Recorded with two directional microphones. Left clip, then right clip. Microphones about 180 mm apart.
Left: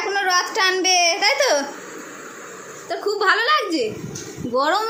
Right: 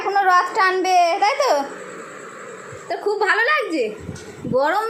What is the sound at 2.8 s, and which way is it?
A woman's voice, 5° left (ahead or behind).